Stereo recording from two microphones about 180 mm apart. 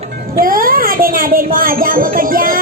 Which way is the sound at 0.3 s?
50° right (ahead or behind).